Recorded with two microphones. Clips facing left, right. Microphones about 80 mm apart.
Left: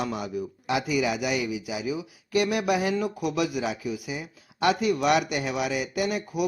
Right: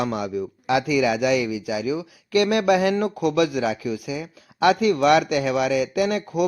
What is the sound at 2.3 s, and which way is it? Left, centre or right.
Speech, right.